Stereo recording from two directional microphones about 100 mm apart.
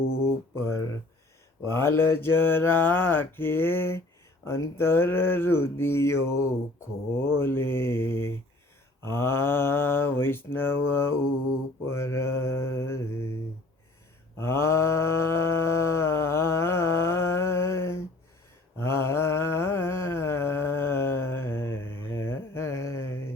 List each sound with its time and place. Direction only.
0.1 s mantra: 25° left (ahead or behind)
14.3 s mantra: 25° left (ahead or behind)